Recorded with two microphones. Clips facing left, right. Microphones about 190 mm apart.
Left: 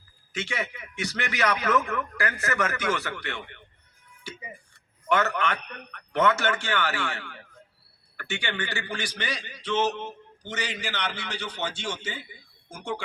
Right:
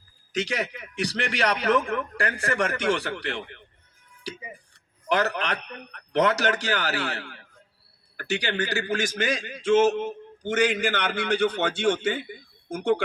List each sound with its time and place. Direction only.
0.3 s a man's voice: 40° right (ahead or behind)
5.1 s a man's voice: 35° right (ahead or behind); by 13.0 s 60° right (ahead or behind)